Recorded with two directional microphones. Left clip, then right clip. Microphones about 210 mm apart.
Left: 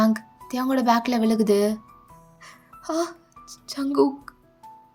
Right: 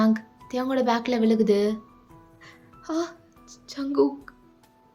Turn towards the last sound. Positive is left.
turn(degrees=0)  # may be behind; listen again after turning